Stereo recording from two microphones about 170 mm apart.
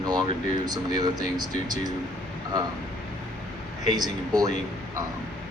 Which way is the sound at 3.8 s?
25° right (ahead or behind).